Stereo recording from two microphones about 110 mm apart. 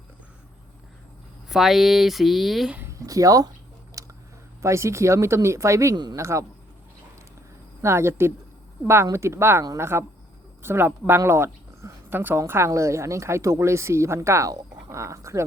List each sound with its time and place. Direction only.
1.5 s speech: centre (ahead or behind)
3.1 s speech: 30° right (ahead or behind)
4.0 s a sound: 30° right (ahead or behind)
4.6 s speech: 25° right (ahead or behind)
7.8 s speech: 25° right (ahead or behind)